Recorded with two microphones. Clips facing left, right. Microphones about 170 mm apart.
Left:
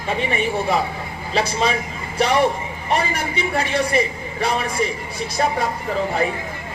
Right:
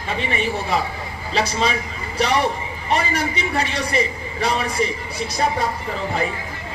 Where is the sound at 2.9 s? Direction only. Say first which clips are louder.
Right 1 dB; 55° left (ahead or behind).